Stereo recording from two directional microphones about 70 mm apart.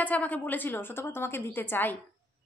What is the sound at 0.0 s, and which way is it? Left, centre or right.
A woman's voice, left.